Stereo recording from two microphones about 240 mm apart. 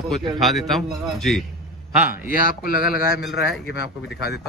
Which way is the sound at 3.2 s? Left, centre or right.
Centre.